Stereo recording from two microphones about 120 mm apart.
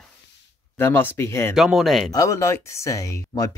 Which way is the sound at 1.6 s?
Centre (ahead or behind).